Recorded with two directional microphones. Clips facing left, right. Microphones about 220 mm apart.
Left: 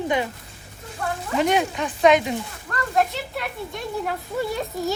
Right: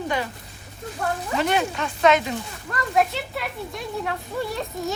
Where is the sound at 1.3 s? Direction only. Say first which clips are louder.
Left 3 dB; 15° left (ahead or behind).